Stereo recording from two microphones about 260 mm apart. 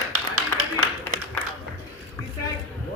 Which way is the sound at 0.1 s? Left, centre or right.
Right.